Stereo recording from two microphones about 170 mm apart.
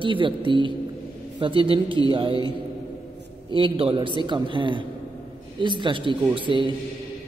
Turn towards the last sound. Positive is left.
turn(degrees=-30)  # may be behind; listen again after turning